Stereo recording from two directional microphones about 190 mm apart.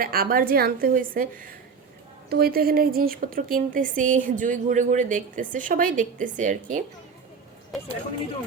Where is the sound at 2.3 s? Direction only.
55° right (ahead or behind).